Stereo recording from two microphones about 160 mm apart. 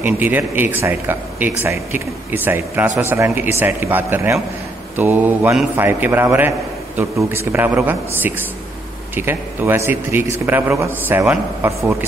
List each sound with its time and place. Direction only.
0.0 s speech: 10° right (ahead or behind)